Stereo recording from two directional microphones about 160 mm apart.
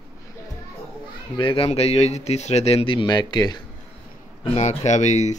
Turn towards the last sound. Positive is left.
turn(degrees=45)  # may be behind; listen again after turning